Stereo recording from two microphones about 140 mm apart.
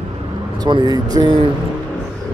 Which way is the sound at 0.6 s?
30° right (ahead or behind).